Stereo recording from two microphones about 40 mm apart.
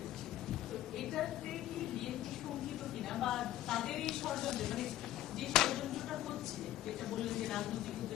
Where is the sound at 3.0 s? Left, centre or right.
Centre.